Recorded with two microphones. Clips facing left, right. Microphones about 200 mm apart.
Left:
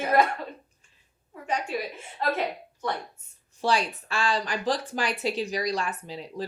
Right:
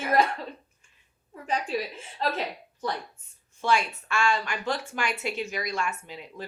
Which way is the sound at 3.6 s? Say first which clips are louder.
Even; 35° left (ahead or behind).